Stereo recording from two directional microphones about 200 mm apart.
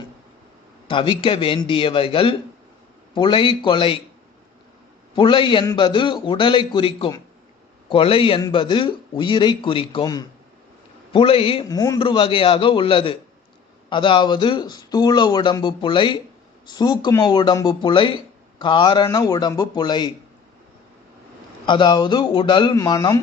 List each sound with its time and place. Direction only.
0.9 s a man's voice: 25° left (ahead or behind)
5.1 s a man's voice: 25° left (ahead or behind)
21.7 s a man's voice: 25° left (ahead or behind)